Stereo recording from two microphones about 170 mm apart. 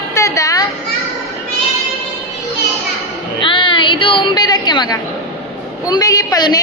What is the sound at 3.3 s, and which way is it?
A woman's voice, 30° left (ahead or behind).